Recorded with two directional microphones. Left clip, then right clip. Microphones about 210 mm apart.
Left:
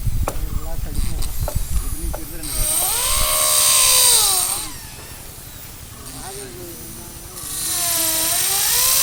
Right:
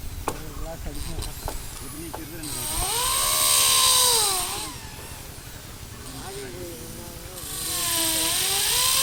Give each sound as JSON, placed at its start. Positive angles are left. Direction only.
{"t": 2.5, "sound": "helicopter", "side_deg": 25}
{"t": 7.5, "sound": "helicopter", "side_deg": 25}